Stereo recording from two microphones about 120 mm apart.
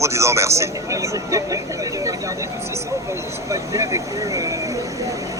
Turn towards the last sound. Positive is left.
turn(degrees=-30)  # may be behind; listen again after turning